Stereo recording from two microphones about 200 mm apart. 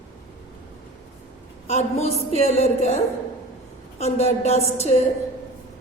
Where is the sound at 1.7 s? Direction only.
30° left (ahead or behind).